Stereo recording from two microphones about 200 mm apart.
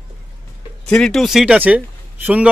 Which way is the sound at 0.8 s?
5° left (ahead or behind).